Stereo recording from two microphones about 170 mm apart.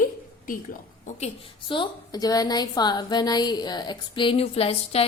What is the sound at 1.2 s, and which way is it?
Speech, 30° left (ahead or behind).